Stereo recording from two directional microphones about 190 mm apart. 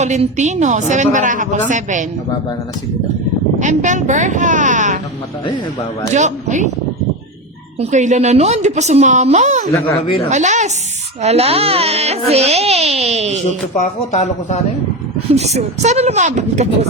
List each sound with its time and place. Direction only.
0.0 s a woman's voice: 40° right (ahead or behind)
3.6 s a woman's voice: 40° right (ahead or behind)
6.1 s a woman's voice: 40° right (ahead or behind)
7.8 s a woman's voice: 40° right (ahead or behind)
9.7 s speech: 15° left (ahead or behind)
10.2 s a woman's voice: 40° right (ahead or behind)
13.7 s speech: 35° left (ahead or behind)
15.4 s a woman's voice: 35° right (ahead or behind)